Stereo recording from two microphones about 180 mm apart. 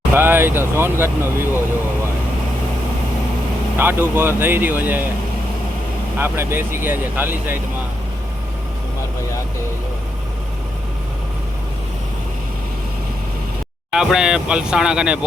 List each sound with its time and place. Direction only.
0.1 s speech: 10° right (ahead or behind)
3.8 s speech: 10° right (ahead or behind)
6.1 s speech: 10° right (ahead or behind)
13.9 s speech: 5° right (ahead or behind)